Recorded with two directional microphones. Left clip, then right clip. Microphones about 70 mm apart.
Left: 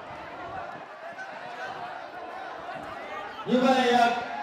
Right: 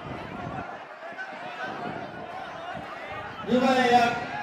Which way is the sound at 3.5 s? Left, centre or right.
Right.